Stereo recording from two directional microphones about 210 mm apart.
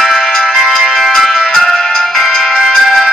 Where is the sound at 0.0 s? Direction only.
Centre (ahead or behind).